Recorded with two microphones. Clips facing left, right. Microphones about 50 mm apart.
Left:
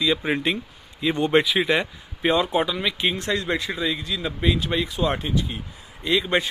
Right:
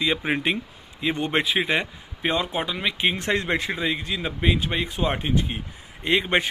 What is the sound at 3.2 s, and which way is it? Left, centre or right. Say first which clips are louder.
A man's voice: right 1 dB; right.